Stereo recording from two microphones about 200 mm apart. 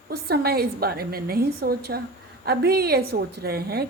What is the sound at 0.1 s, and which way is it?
A woman's voice, 50° right (ahead or behind).